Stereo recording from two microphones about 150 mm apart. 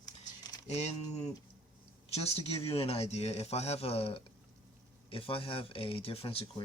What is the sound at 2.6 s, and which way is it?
Speech, 40° left (ahead or behind).